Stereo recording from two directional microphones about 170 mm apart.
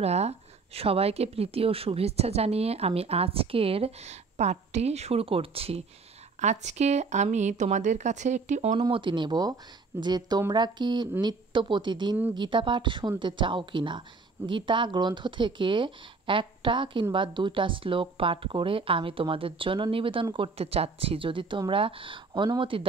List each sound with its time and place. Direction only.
0.0 s a woman's voice: 40° right (ahead or behind)
8.7 s speech: 30° right (ahead or behind)